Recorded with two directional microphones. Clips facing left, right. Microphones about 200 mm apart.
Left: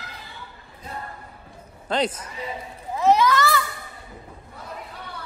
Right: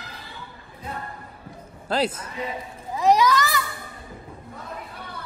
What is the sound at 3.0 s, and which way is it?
Children playing, 15° right (ahead or behind).